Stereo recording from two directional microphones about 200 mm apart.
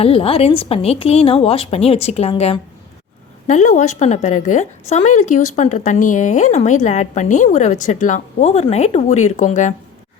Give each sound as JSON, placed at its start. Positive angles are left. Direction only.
{"t": 0.0, "sound": "a woman's voice", "side_deg": 30}